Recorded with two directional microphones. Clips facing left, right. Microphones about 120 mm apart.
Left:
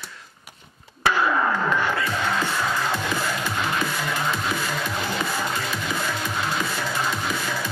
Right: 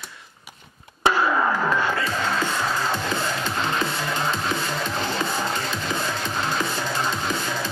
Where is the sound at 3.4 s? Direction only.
25° right (ahead or behind).